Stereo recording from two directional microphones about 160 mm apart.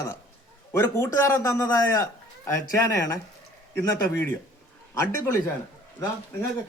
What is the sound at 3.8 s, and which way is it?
Speech, 15° left (ahead or behind).